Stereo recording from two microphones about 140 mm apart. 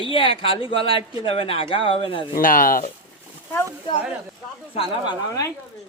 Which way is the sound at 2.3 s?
85° left.